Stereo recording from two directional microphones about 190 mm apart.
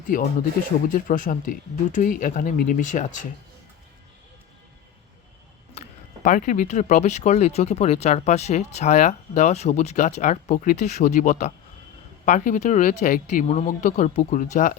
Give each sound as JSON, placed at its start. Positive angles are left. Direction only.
{"t": 0.1, "sound": "speech", "side_deg": 45}
{"t": 5.7, "sound": "speech", "side_deg": 40}